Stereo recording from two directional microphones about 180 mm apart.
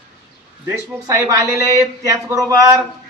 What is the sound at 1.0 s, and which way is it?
Speech, 20° right (ahead or behind).